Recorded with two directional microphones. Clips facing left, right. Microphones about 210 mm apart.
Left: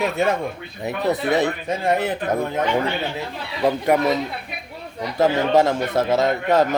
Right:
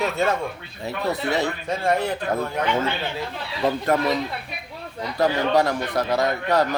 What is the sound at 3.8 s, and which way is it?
Speech, 20° left (ahead or behind).